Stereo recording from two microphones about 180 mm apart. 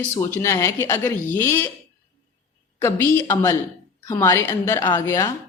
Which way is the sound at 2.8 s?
15° left (ahead or behind).